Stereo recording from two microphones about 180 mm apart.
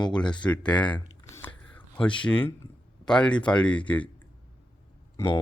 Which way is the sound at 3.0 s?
5° left (ahead or behind).